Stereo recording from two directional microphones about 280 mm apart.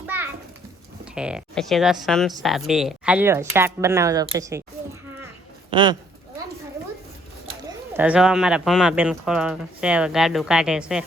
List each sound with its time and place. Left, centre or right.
0.0 s a sound: centre
1.1 s speech: centre
5.7 s speech: centre
7.7 s speech: centre